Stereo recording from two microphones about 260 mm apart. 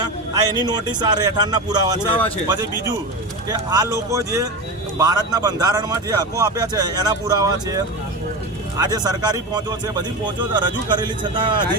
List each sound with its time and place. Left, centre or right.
0.0 s a man's voice: centre
3.5 s a man's voice: centre
8.8 s a man's voice: centre